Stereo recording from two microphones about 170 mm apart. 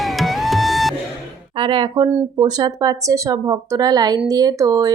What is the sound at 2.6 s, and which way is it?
Speech, 20° right (ahead or behind).